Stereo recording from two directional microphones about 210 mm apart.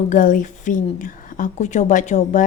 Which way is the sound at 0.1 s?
40° left (ahead or behind).